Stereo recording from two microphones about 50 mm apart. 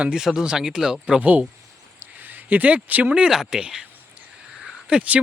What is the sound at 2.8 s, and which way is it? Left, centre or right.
Speech, right.